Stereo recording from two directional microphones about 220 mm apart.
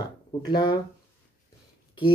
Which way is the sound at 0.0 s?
20° left (ahead or behind).